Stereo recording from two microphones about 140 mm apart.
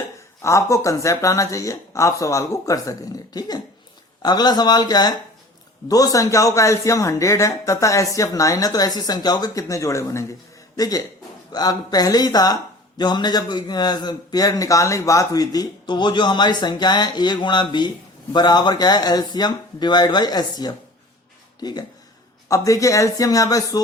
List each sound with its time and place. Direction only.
0.4 s a man's voice: 20° left (ahead or behind)